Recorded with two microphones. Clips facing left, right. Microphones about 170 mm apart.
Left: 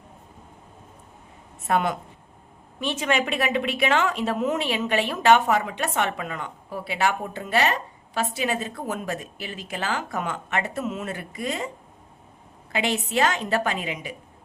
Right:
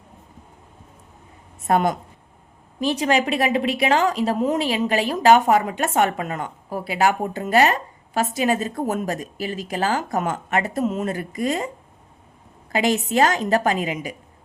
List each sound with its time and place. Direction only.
1.6 s a woman's voice: 40° right (ahead or behind)
12.7 s a woman's voice: 40° right (ahead or behind)